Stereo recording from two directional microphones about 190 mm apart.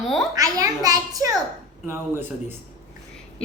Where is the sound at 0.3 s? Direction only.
20° right (ahead or behind).